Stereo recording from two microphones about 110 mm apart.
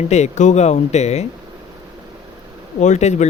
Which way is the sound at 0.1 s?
90° left.